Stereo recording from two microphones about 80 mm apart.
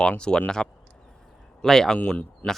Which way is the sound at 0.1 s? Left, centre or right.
Centre.